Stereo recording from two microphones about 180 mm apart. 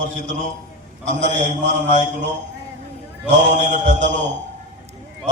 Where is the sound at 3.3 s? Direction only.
45° right (ahead or behind).